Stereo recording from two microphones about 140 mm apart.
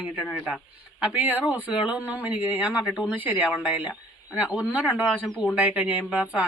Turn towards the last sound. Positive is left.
turn(degrees=-10)  # may be behind; listen again after turning